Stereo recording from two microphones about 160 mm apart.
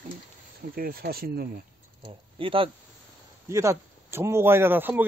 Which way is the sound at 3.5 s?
20° right (ahead or behind).